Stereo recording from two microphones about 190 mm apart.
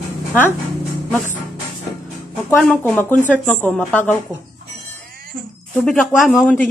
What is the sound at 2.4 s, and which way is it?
Speech, 10° left (ahead or behind).